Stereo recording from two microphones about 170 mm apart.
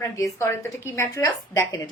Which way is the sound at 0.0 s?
15° left (ahead or behind).